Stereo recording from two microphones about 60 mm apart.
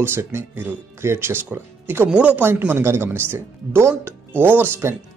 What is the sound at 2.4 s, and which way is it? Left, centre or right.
Speech, right.